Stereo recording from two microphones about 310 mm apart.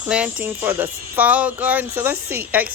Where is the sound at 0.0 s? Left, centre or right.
Centre.